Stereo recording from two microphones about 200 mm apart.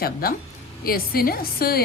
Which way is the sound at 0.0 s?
50° left (ahead or behind).